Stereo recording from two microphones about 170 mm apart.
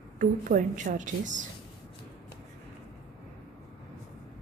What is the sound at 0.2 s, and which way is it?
A woman's voice, 50° right (ahead or behind).